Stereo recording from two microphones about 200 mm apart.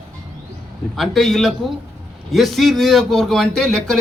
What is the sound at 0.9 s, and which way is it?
A man's voice, centre (ahead or behind).